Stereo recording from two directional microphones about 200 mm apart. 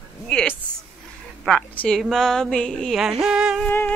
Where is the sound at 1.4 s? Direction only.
5° left (ahead or behind).